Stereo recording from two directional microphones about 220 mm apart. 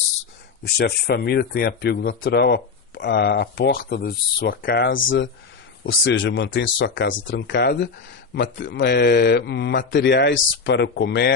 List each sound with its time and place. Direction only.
0.6 s speech: 45° left (ahead or behind)
4.9 s speech: 60° left (ahead or behind)